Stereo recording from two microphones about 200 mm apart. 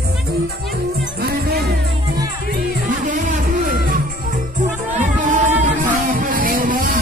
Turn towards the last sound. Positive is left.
turn(degrees=-45)  # may be behind; listen again after turning